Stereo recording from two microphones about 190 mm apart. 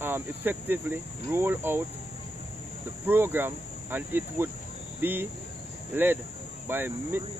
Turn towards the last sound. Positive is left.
turn(degrees=-10)  # may be behind; listen again after turning